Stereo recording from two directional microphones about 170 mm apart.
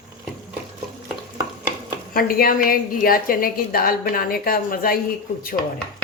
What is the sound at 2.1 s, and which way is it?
A woman's voice, 60° left (ahead or behind).